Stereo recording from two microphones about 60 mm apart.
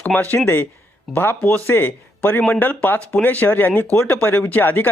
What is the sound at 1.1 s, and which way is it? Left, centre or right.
Speech, left.